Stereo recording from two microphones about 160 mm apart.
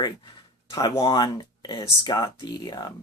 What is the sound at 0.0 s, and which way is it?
Speech, 30° left (ahead or behind).